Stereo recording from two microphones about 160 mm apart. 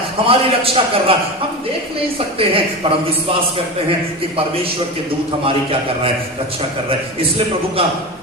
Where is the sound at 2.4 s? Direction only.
35° right (ahead or behind).